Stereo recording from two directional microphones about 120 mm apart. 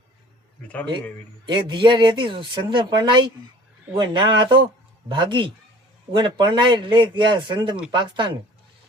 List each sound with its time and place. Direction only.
1.5 s speech: 40° right (ahead or behind)